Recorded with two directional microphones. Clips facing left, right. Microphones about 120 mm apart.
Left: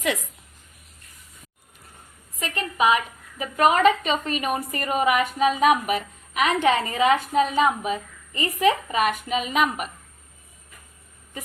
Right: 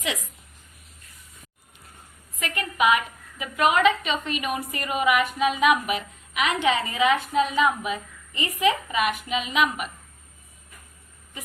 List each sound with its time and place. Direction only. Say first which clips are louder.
2.4 s a woman's voice: left 1 dB; 30° left (ahead or behind)